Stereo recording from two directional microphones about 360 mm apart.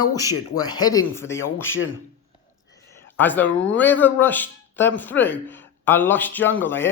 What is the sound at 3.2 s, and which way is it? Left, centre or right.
Speech, centre.